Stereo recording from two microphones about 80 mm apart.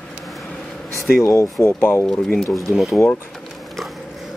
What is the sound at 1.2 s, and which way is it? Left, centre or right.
Speech, left.